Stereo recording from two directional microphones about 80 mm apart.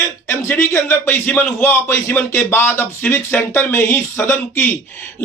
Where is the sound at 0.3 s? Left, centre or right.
Left.